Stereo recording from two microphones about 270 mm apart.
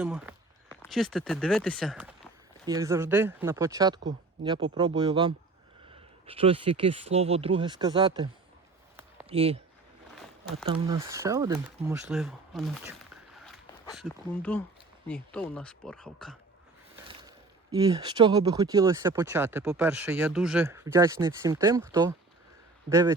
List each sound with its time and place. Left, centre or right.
0.0 s speech: centre
9.3 s speech: right
10.7 s speech: centre
13.9 s speech: centre
17.1 s speech: centre